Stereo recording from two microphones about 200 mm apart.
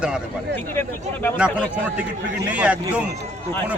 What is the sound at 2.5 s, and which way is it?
Speech, 5° right (ahead or behind).